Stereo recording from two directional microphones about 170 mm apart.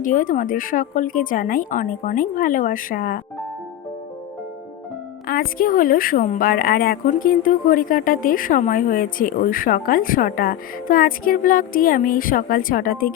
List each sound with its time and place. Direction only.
0.0 s a woman's voice: 50° left (ahead or behind)
5.3 s a woman's voice: 55° left (ahead or behind)